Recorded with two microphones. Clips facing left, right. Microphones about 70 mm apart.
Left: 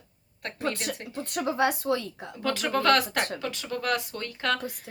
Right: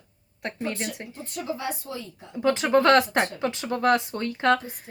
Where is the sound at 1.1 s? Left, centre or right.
Left.